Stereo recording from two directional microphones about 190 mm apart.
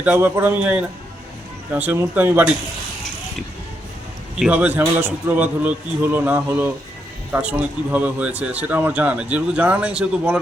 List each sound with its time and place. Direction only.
0.0 s speech: 10° right (ahead or behind)
4.4 s speech: 5° right (ahead or behind)